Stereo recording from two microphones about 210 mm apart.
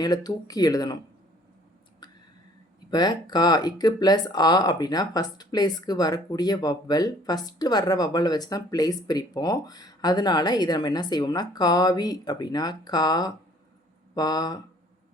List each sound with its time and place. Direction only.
0.0 s speech: 20° left (ahead or behind)
2.9 s speech: 20° left (ahead or behind)